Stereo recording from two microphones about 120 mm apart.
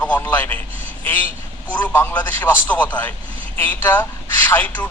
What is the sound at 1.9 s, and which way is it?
A man's voice, 15° left (ahead or behind).